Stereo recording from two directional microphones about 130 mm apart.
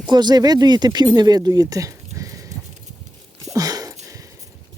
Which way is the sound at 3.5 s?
30° right (ahead or behind).